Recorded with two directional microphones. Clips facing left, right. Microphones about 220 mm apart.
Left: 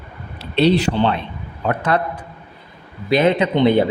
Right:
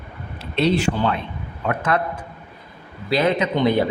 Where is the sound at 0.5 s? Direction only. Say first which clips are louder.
Left 4 dB; 35° left (ahead or behind).